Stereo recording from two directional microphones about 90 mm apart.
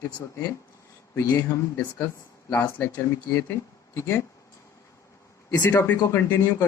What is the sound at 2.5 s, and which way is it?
Speech, 20° left (ahead or behind).